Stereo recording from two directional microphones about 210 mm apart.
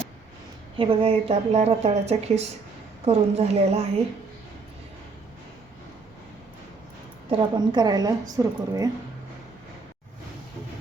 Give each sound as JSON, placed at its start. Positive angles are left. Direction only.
{"t": 0.8, "sound": "a woman's voice", "side_deg": -25}
{"t": 7.3, "sound": "a woman's voice", "side_deg": -25}